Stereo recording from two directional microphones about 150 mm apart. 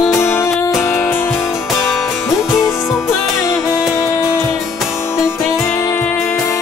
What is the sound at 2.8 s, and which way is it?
Music, centre (ahead or behind).